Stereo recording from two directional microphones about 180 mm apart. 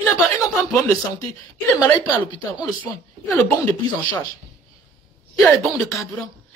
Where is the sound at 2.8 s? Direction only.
10° left (ahead or behind).